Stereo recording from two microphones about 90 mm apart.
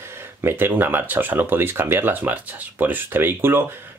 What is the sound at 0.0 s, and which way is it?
Speech, 25° right (ahead or behind).